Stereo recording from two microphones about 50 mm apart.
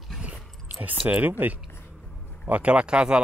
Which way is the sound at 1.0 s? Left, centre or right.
Right.